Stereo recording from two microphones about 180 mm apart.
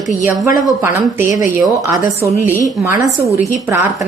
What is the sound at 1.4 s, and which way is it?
Speech, 15° right (ahead or behind).